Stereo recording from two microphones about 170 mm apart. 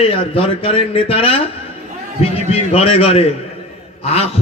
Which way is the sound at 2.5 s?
35° left (ahead or behind).